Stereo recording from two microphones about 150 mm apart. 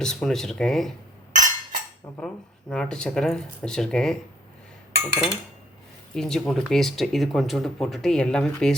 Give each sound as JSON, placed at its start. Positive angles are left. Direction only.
{"t": 0.0, "sound": "speech", "side_deg": 5}
{"t": 1.3, "sound": "a sound", "side_deg": -60}
{"t": 2.1, "sound": "speech", "side_deg": 5}
{"t": 6.1, "sound": "speech", "side_deg": 5}